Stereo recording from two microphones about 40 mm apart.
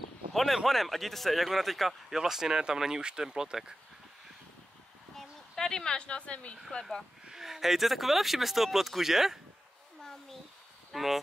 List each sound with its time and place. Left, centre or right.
0.3 s a sound: centre
0.7 s speech: centre
2.0 s speech: centre
5.1 s a sound: centre; by 6.5 s left
6.7 s speech: centre
7.2 s speech: centre
10.9 s speech: centre